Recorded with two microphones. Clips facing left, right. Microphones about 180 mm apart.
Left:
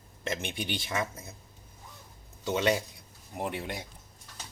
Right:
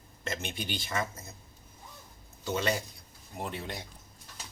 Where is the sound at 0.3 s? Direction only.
15° left (ahead or behind).